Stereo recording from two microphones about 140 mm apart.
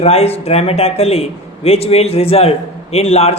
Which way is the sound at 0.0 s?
45° left (ahead or behind).